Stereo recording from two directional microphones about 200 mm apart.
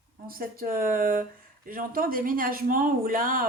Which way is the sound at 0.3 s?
45° right (ahead or behind).